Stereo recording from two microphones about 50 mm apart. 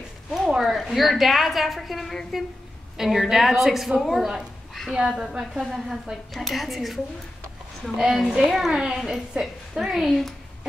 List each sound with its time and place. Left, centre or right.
0.5 s a woman's voice: centre
3.0 s a woman's voice: centre
8.0 s a woman's voice: centre